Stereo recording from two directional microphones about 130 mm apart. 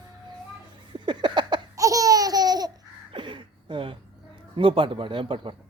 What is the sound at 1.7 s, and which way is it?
Laughter, 25° right (ahead or behind).